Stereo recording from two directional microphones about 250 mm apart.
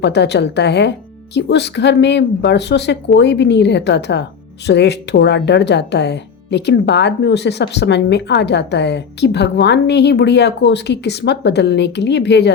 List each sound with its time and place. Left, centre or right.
0.0 s speech: left